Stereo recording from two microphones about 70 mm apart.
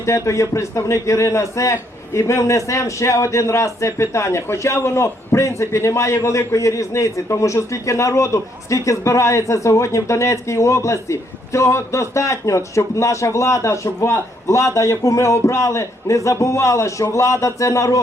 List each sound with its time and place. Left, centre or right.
0.0 s a man's voice: left